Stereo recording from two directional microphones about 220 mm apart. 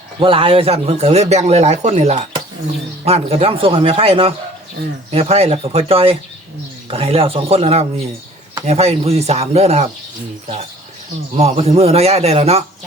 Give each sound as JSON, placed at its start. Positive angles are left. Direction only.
{"t": 0.2, "sound": "speech", "side_deg": -25}
{"t": 11.3, "sound": "speech", "side_deg": -30}